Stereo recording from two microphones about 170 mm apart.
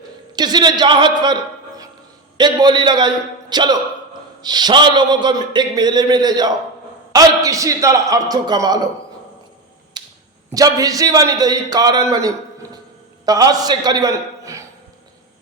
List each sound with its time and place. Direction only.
0.3 s a man's voice: 25° right (ahead or behind)
2.4 s a man's voice: 25° right (ahead or behind)
10.0 s finger snapping: 25° right (ahead or behind)
10.5 s a man's voice: 20° right (ahead or behind)